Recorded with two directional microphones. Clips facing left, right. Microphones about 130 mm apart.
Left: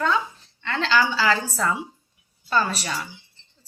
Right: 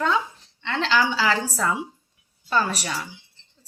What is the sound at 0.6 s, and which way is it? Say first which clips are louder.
A woman's voice: even; 15° right (ahead or behind).